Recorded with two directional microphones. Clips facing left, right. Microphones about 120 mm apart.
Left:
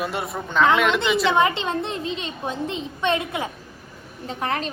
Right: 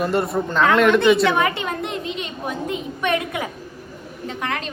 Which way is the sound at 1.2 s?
25° left (ahead or behind).